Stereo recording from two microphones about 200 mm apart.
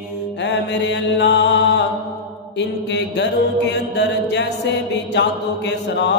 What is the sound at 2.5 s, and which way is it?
Mantra, 60° left (ahead or behind).